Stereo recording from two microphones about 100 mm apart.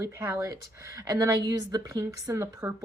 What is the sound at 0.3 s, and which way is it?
Speech, 30° right (ahead or behind).